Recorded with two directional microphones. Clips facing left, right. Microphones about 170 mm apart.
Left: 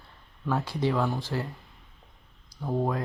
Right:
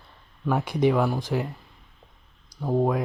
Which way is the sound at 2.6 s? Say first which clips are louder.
Right 5 dB; 25° right (ahead or behind).